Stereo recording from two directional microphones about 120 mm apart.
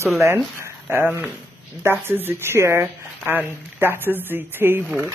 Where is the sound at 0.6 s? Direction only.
20° right (ahead or behind).